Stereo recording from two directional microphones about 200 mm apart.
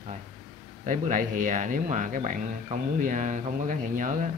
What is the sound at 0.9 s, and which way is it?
Speech, 40° right (ahead or behind).